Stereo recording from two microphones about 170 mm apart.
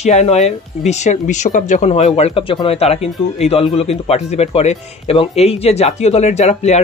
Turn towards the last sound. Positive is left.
turn(degrees=40)  # may be behind; listen again after turning